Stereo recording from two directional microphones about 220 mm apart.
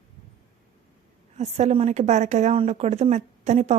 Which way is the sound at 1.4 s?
30° right (ahead or behind).